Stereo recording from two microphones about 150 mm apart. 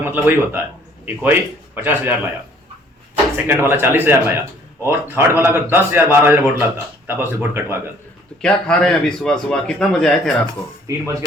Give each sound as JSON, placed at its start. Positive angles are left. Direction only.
{"t": 0.0, "sound": "speech", "side_deg": -15}
{"t": 3.3, "sound": "speech", "side_deg": -15}
{"t": 8.4, "sound": "a man's voice", "side_deg": 5}
{"t": 10.8, "sound": "speech", "side_deg": -20}